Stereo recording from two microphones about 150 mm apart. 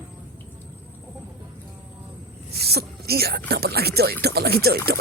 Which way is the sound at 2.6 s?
90° right.